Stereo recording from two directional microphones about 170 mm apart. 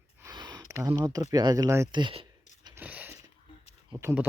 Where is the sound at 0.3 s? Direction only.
25° right (ahead or behind).